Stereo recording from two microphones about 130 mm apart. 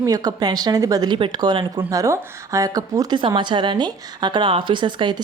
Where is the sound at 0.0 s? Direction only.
30° right (ahead or behind).